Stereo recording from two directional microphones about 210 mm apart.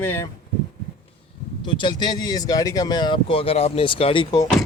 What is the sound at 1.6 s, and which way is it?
Speech, 20° left (ahead or behind).